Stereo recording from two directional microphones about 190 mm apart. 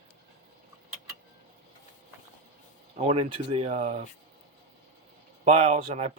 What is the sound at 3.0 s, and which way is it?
Speech, 30° right (ahead or behind).